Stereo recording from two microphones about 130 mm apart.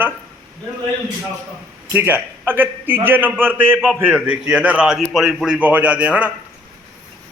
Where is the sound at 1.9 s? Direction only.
15° right (ahead or behind).